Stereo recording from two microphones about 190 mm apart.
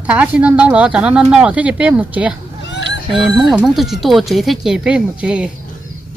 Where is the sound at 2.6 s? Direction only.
70° left (ahead or behind).